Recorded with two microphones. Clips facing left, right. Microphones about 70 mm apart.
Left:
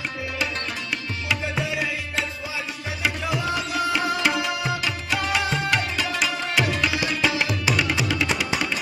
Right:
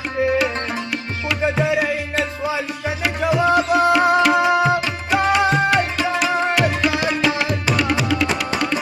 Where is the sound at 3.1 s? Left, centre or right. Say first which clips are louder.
Right 10 dB; right.